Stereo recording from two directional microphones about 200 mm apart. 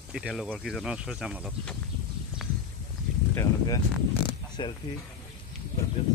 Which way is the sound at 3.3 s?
15° left (ahead or behind).